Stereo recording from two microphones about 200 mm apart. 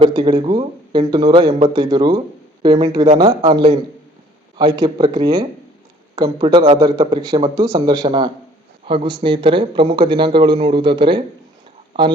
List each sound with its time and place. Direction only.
0.0 s speech: 20° right (ahead or behind)
3.2 s speech: 20° right (ahead or behind)